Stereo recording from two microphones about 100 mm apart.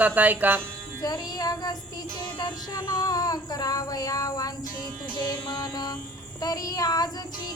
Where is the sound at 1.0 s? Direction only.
40° left (ahead or behind).